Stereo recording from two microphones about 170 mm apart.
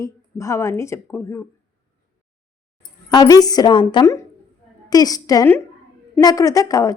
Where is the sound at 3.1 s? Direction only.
20° left (ahead or behind).